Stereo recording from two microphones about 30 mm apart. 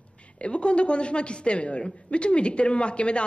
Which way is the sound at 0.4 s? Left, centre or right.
Left.